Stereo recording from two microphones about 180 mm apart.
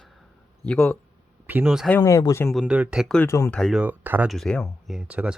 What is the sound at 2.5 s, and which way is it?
Speech, 5° right (ahead or behind).